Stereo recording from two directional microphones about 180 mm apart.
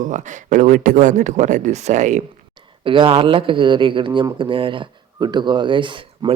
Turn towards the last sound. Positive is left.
turn(degrees=-25)  # may be behind; listen again after turning